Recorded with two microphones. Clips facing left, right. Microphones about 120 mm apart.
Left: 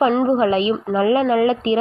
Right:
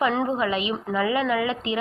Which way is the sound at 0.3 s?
35° left (ahead or behind).